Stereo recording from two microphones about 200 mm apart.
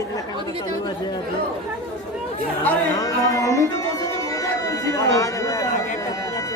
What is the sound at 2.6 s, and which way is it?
Speech, 15° left (ahead or behind).